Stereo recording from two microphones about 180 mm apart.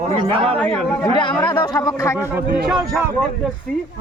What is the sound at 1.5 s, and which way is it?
Speech, 20° left (ahead or behind).